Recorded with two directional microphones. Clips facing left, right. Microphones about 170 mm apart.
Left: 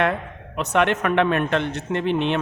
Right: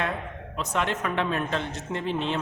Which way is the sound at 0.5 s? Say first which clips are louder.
Left 8 dB; 70° left (ahead or behind).